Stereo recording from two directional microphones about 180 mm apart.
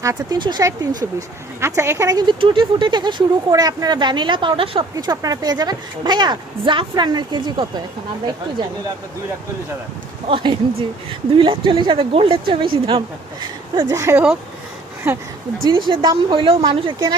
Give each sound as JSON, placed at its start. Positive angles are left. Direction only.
{"t": 0.0, "sound": "speech", "side_deg": -20}
{"t": 10.2, "sound": "speech", "side_deg": -30}
{"t": 13.9, "sound": "speech", "side_deg": -15}
{"t": 15.9, "sound": "speech", "side_deg": -25}